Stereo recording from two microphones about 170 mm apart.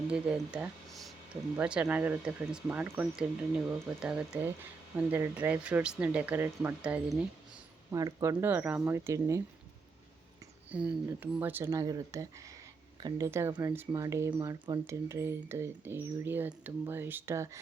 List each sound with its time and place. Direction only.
0.1 s speech: 5° right (ahead or behind)
10.7 s speech: 10° right (ahead or behind)